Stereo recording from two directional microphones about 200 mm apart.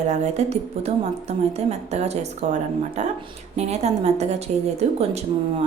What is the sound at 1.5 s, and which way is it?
Speech, 35° right (ahead or behind).